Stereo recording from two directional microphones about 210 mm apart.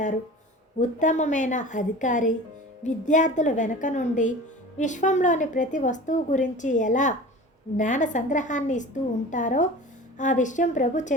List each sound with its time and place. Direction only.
0.8 s a woman's voice: 35° left (ahead or behind)